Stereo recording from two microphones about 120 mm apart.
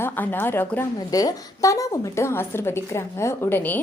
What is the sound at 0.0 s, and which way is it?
Speech, 15° left (ahead or behind).